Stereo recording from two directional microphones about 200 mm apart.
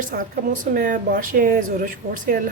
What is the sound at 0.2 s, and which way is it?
Speech, 45° right (ahead or behind).